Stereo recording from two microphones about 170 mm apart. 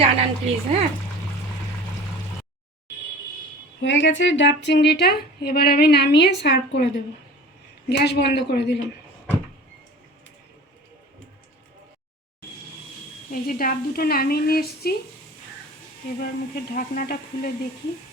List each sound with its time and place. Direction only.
0.0 s a woman's voice: 35° right (ahead or behind)
3.8 s a woman's voice: 90° left
13.3 s a woman's voice: 60° left (ahead or behind)
16.0 s a woman's voice: 60° left (ahead or behind)